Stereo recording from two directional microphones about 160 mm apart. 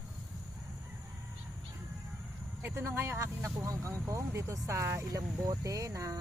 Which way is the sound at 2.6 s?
15° right (ahead or behind).